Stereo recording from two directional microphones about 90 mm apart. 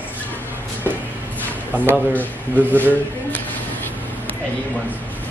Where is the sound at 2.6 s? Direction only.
20° right (ahead or behind).